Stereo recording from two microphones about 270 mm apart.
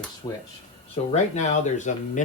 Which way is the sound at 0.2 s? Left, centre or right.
Centre.